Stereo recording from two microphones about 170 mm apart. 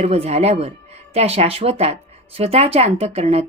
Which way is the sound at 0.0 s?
35° right (ahead or behind).